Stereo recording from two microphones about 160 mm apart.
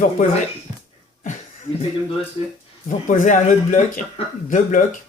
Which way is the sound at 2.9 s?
55° left (ahead or behind).